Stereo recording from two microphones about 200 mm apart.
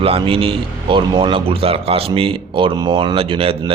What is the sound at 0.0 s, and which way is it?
Speech, 25° right (ahead or behind).